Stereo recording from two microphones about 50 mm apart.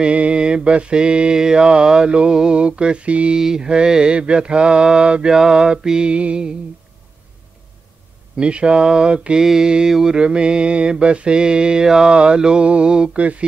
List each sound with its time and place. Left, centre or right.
0.0 s mantra: right
3.3 s mantra: centre
8.4 s mantra: right